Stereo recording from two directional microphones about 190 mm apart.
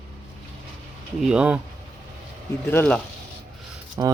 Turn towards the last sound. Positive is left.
turn(degrees=-15)  # may be behind; listen again after turning